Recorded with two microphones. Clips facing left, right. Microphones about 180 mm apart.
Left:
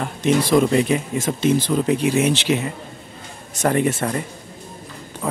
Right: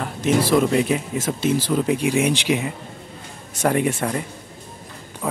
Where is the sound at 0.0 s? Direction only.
5° right (ahead or behind).